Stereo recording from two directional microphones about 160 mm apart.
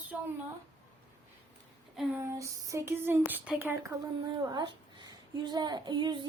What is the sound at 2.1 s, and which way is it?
Speech, 20° right (ahead or behind).